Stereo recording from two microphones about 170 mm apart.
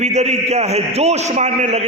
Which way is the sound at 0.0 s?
40° right (ahead or behind).